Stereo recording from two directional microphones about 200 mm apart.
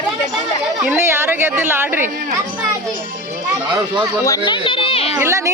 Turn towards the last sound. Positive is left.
turn(degrees=-15)  # may be behind; listen again after turning